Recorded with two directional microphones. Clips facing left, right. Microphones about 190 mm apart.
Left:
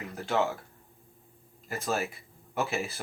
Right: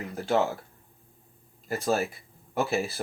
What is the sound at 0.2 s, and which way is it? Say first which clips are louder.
Speech: right 3 dB; 35° right (ahead or behind).